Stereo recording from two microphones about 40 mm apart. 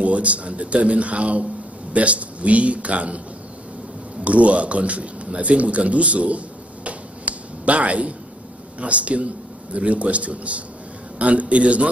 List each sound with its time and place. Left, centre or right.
0.0 s speech: right
4.2 s a man's voice: right